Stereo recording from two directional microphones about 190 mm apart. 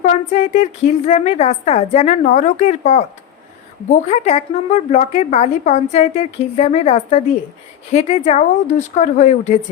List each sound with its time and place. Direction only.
0.0 s a woman's voice: 35° left (ahead or behind)
4.1 s a woman's voice: 35° left (ahead or behind)